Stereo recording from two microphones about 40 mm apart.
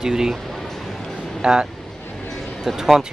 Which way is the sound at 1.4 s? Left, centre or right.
Right.